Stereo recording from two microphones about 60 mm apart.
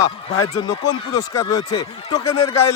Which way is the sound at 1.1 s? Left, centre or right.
Left.